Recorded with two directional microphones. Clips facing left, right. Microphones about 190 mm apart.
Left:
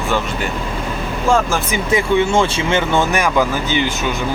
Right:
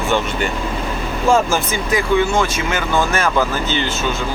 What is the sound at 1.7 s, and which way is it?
Speech, 25° left (ahead or behind).